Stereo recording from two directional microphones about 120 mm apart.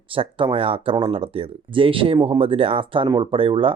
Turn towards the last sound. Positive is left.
turn(degrees=-50)  # may be behind; listen again after turning